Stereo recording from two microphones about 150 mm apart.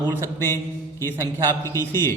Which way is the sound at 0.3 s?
15° left (ahead or behind).